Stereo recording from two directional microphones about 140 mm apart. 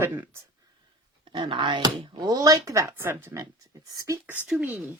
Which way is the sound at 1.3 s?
35° right (ahead or behind).